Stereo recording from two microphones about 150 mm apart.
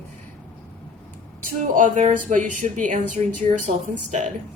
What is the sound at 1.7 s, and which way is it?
Speech, 55° right (ahead or behind).